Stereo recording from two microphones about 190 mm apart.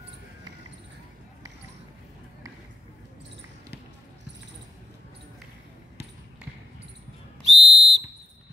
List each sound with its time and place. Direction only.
7.4 s whistle: 70° right (ahead or behind)